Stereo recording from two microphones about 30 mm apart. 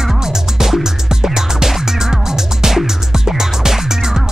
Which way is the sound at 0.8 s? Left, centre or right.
Centre.